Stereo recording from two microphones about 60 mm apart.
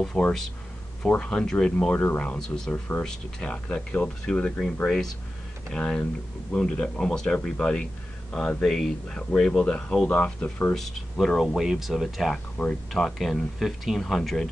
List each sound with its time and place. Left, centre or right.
0.1 s speech: centre
2.0 s speech: left
2.3 s speech: centre
3.5 s speech: left
4.8 s speech: centre
10.7 s speech: centre
12.6 s speech: centre